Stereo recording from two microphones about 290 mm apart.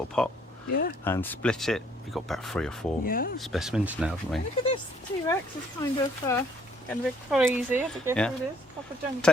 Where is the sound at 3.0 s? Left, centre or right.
Left.